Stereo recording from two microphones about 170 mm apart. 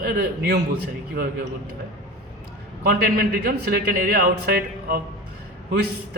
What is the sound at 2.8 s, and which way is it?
A man's voice, 70° right (ahead or behind).